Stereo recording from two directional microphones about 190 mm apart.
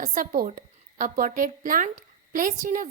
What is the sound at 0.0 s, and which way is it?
A woman's voice, 45° right (ahead or behind).